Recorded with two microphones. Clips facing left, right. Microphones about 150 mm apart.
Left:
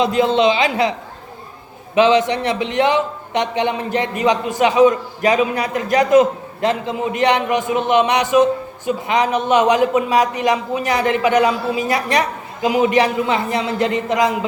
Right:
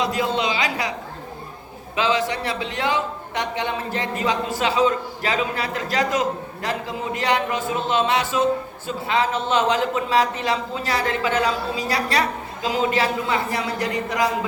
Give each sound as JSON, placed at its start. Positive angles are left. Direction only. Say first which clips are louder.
{"t": 0.0, "sound": "a man's voice", "louder": "left 8 dB", "side_deg": 20}
{"t": 2.0, "sound": "a man's voice", "louder": "left 8 dB", "side_deg": 20}